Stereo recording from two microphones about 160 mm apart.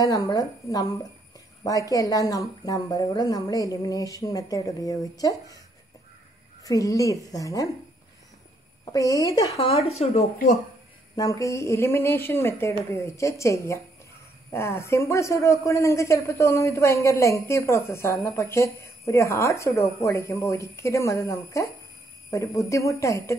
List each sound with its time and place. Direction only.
0.0 s speech: 20° left (ahead or behind)
6.6 s speech: 20° left (ahead or behind)
8.9 s speech: 20° left (ahead or behind)
9.6 s speech: 40° left (ahead or behind)
11.1 s speech: 20° left (ahead or behind)